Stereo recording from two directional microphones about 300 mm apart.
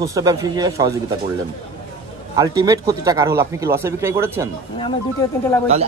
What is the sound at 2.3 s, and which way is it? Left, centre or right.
Speech, centre.